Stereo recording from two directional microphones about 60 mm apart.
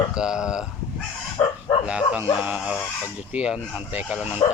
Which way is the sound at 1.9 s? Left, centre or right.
Right.